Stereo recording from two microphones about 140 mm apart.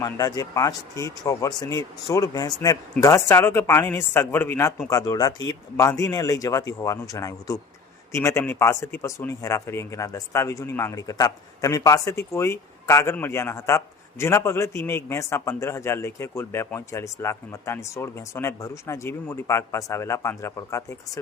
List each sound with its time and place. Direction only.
0.0 s a man's voice: 25° left (ahead or behind)